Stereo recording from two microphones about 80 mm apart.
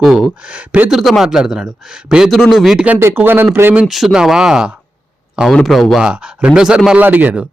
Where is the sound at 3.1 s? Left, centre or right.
Right.